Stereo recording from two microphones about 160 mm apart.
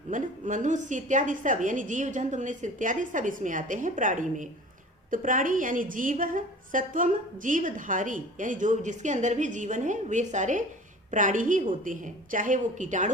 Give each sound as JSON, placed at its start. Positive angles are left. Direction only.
{"t": 0.1, "sound": "a woman's voice", "side_deg": -50}